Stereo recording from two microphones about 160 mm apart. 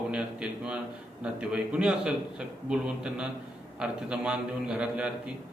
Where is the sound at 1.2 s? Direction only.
5° right (ahead or behind).